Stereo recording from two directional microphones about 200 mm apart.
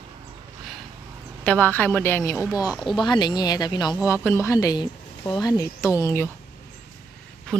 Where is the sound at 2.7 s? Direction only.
Centre (ahead or behind).